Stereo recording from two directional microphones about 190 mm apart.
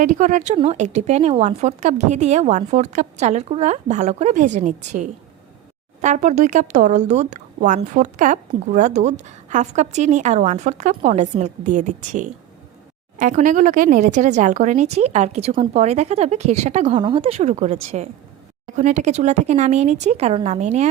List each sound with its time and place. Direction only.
0.0 s speech: 40° right (ahead or behind)
17.0 s speech: 25° right (ahead or behind)